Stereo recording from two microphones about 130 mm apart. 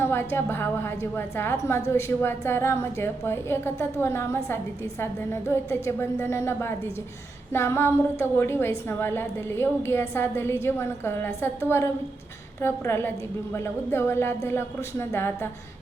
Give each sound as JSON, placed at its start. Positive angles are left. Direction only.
{"t": 0.0, "sound": "a woman's voice", "side_deg": 20}